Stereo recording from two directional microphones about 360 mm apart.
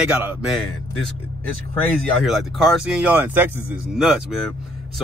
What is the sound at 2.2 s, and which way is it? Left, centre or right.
Speech, centre.